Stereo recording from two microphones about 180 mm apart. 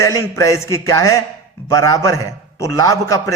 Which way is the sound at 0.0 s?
15° left (ahead or behind).